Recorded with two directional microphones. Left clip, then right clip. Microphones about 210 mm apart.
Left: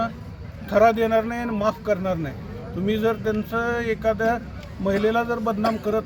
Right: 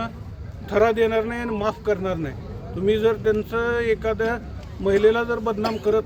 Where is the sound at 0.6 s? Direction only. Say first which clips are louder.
Left 1 dB; 5° right (ahead or behind).